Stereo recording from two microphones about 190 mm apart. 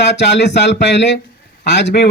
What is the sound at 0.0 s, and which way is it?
Speech, 65° left (ahead or behind).